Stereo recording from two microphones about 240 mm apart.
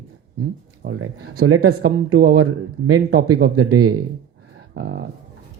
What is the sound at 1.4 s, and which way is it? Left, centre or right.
Speech, right.